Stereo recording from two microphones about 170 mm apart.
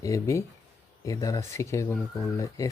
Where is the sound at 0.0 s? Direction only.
20° left (ahead or behind).